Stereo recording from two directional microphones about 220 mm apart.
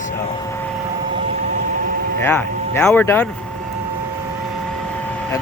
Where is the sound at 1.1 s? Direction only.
35° right (ahead or behind).